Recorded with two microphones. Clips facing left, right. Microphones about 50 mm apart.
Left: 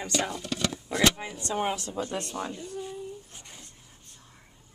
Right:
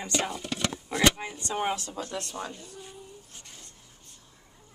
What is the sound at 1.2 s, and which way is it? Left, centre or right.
Speech, centre.